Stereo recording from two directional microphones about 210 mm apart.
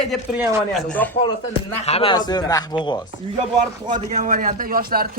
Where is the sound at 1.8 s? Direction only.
30° left (ahead or behind).